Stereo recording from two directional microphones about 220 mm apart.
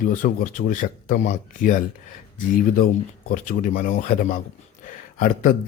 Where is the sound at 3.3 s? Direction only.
40° left (ahead or behind).